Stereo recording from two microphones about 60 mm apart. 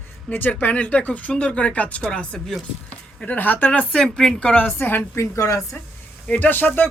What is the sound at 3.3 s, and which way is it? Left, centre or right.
Speech, left.